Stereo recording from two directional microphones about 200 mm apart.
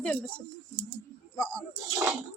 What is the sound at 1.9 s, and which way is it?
Child singing, 15° right (ahead or behind).